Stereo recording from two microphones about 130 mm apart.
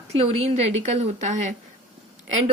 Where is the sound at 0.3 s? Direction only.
55° right (ahead or behind); by 1.5 s 70° right (ahead or behind).